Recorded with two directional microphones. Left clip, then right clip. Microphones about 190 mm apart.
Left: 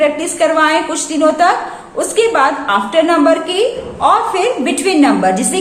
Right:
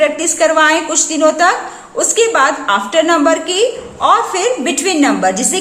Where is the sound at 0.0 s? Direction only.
25° right (ahead or behind).